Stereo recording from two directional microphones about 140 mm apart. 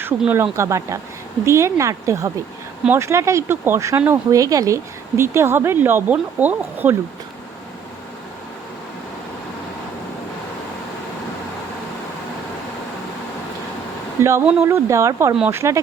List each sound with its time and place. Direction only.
0.2 s speech: 10° right (ahead or behind)
14.2 s speech: 20° right (ahead or behind)